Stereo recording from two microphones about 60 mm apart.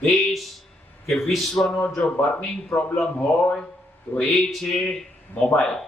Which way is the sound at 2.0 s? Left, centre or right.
Centre.